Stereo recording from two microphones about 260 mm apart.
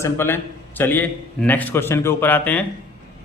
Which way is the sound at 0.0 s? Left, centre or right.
Centre.